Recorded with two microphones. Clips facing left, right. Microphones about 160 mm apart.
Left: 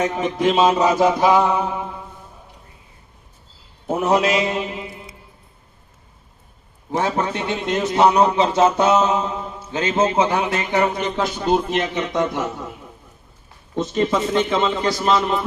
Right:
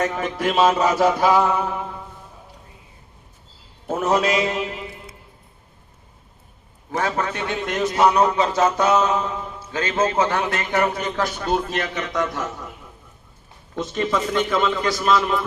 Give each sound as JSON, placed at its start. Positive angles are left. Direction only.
{"t": 0.0, "sound": "mantra", "side_deg": 20}
{"t": 3.8, "sound": "mantra", "side_deg": 20}
{"t": 6.9, "sound": "a man's voice", "side_deg": 20}
{"t": 14.1, "sound": "a man's voice", "side_deg": 25}